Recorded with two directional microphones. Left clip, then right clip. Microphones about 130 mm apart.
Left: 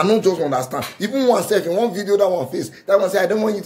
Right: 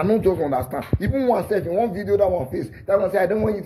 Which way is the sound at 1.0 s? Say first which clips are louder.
Left 4 dB; 40° left (ahead or behind).